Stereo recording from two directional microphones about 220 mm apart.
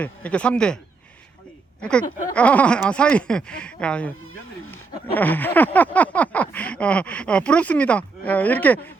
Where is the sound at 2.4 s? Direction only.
5° left (ahead or behind).